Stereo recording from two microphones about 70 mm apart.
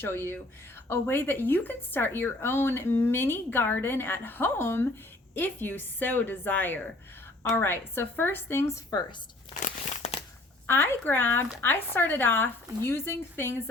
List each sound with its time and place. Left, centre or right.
0.0 s a woman's voice: left
10.7 s speech: left